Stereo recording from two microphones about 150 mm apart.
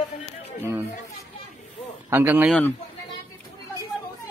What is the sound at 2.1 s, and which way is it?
Speech, 15° right (ahead or behind).